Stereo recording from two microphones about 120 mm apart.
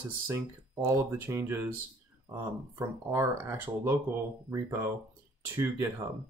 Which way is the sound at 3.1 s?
20° right (ahead or behind).